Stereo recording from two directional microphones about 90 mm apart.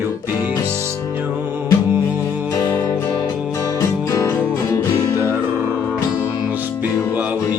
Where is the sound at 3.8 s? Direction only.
35° left (ahead or behind).